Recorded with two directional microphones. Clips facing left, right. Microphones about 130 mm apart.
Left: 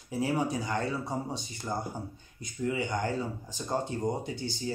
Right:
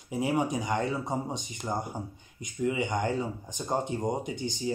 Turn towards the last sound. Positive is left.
turn(degrees=-20)  # may be behind; listen again after turning